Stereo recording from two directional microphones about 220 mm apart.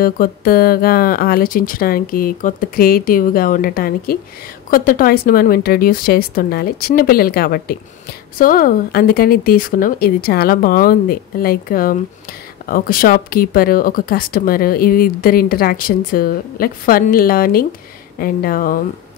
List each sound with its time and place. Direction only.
0.0 s speech: 40° left (ahead or behind)